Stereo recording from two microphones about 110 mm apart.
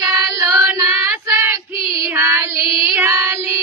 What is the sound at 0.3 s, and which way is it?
Child singing, 25° right (ahead or behind).